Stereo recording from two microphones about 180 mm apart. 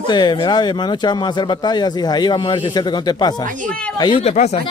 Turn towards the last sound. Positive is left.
turn(degrees=40)  # may be behind; listen again after turning